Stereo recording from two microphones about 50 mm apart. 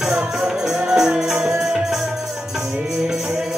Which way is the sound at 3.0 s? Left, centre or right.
Centre.